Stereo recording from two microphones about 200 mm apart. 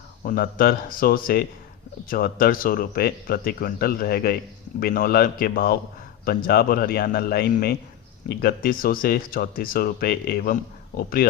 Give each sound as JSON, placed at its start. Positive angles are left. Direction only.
{"t": 0.2, "sound": "speech", "side_deg": 45}